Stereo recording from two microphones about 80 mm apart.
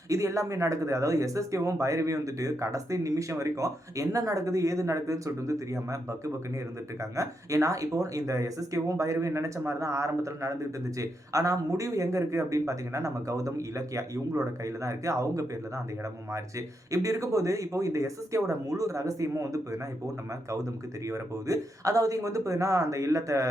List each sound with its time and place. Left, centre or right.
0.1 s speech: right
21.1 s speech: right